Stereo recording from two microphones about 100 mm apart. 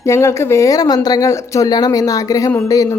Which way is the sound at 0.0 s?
30° left (ahead or behind).